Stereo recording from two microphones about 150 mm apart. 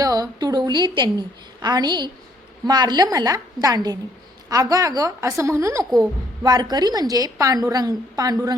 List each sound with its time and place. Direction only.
0.0 s a woman's voice: 25° right (ahead or behind)